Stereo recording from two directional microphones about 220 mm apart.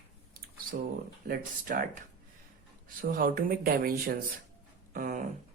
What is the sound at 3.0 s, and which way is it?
Speech, 40° right (ahead or behind).